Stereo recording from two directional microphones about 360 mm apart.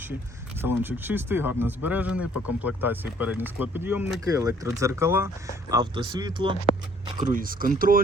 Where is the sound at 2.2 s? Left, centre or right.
Left.